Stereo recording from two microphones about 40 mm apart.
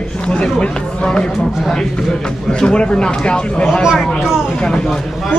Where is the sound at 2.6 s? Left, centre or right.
Left.